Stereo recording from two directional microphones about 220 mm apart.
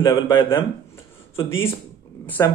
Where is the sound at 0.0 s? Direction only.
20° left (ahead or behind).